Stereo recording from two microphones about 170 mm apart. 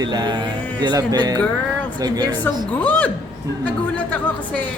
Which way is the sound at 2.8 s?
10° left (ahead or behind).